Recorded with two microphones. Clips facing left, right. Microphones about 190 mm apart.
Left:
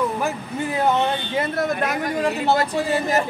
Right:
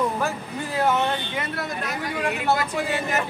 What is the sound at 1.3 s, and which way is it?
Speech, 40° left (ahead or behind).